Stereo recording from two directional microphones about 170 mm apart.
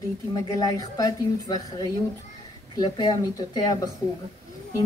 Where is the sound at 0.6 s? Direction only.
20° left (ahead or behind).